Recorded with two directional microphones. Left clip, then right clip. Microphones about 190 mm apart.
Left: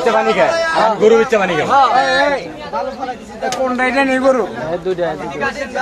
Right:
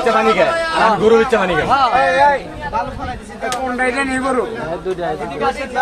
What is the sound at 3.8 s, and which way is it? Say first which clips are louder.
Speech: left 4 dB; 50° left (ahead or behind).